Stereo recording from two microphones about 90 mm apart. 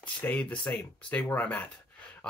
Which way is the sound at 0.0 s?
15° left (ahead or behind).